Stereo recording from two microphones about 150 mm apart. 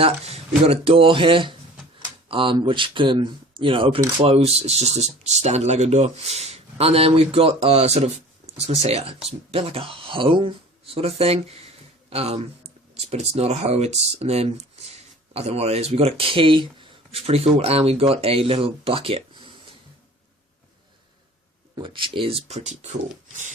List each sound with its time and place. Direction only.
0.0 s speech: 40° right (ahead or behind)
21.8 s speech: 35° right (ahead or behind); by 23.0 s 50° right (ahead or behind)